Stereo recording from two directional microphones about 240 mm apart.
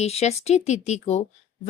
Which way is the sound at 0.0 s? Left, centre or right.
Left.